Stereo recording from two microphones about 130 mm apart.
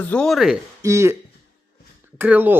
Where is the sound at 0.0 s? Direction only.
10° left (ahead or behind).